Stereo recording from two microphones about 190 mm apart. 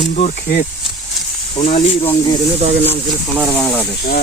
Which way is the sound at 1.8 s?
35° left (ahead or behind).